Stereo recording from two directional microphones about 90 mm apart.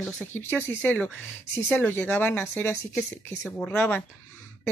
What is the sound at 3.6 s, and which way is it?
Speech, 15° left (ahead or behind).